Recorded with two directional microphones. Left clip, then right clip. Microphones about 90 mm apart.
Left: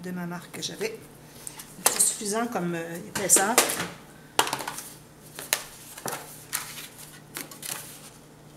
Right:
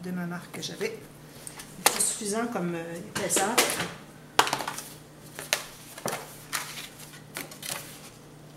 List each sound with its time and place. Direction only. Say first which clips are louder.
0.0 s speech: even; 20° left (ahead or behind); by 3.5 s 40° left (ahead or behind)
4.4 s coin: right 2 dB; 5° left (ahead or behind)
5.3 s shuffling cards: even; 5° left (ahead or behind)
6.0 s a sound: right 1 dB; 10° left (ahead or behind)
7.3 s typewriter: right 1 dB; 10° left (ahead or behind)